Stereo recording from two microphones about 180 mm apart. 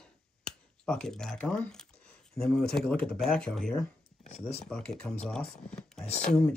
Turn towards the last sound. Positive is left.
turn(degrees=5)  # may be behind; listen again after turning